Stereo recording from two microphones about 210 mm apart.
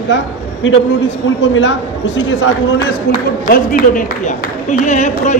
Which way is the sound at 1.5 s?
65° left (ahead or behind).